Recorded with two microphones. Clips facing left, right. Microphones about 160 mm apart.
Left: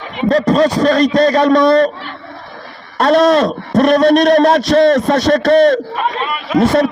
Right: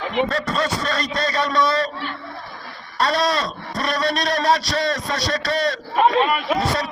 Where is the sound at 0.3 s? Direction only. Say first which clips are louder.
Left 11 dB; 40° left (ahead or behind).